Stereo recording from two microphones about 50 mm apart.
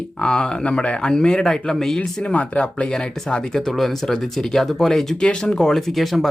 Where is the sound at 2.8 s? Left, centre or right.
Centre.